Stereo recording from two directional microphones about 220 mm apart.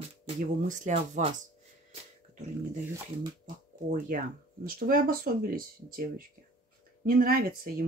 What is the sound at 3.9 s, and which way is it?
Speech, 40° right (ahead or behind).